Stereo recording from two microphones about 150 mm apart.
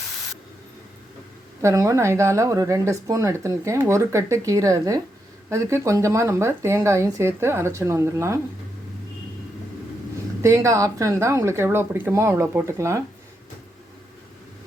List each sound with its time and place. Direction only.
1.6 s speech: 20° right (ahead or behind)
10.4 s speech: 20° right (ahead or behind)